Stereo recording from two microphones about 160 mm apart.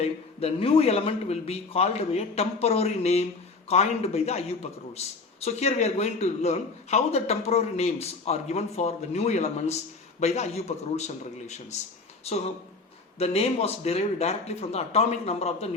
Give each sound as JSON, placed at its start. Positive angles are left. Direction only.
{"t": 0.0, "sound": "a man's voice", "side_deg": 40}